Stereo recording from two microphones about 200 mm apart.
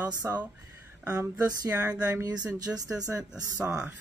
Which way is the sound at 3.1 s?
5° right (ahead or behind).